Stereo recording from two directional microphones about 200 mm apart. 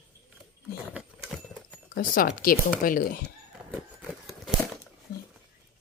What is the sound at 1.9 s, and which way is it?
Speech, 50° left (ahead or behind).